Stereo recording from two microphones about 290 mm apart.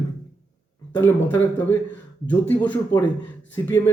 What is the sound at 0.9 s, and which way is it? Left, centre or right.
A man's voice, centre.